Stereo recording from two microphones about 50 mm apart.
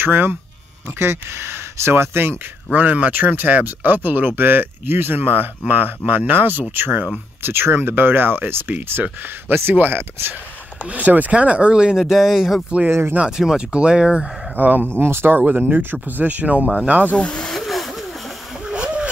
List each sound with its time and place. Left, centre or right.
0.0 s speech: right
0.8 s speech: right
2.7 s speech: right
9.8 s speech: right
10.8 s speech: right
12.0 s speech: centre
12.6 s speech: right
14.5 s speech: right
15.0 s speech: right
15.3 s speech: right
17.1 s speech: left
17.4 s vehicle: centre
18.6 s splash: centre